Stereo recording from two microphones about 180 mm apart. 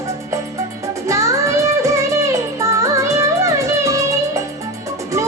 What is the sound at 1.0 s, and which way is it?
Music, 15° right (ahead or behind).